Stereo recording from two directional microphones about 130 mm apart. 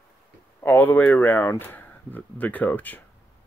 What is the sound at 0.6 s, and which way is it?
Speech, 15° left (ahead or behind).